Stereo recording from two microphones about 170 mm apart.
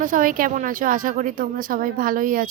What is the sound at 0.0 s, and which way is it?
Speech, 50° right (ahead or behind).